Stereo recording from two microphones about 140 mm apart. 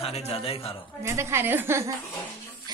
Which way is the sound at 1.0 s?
20° right (ahead or behind).